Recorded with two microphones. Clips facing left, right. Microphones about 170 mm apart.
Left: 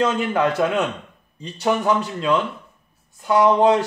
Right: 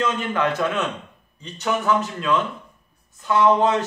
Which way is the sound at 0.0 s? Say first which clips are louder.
Left 3 dB; 30° left (ahead or behind).